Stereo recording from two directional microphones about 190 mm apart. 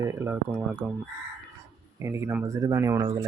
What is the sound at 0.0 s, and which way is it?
Speech, 15° right (ahead or behind).